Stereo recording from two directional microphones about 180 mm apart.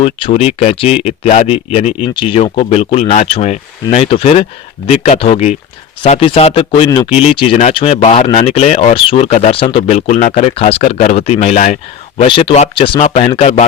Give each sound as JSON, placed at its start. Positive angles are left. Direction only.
{"t": 0.0, "sound": "speech", "side_deg": 30}